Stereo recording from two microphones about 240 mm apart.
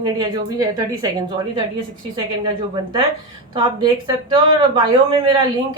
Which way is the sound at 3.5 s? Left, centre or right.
Centre.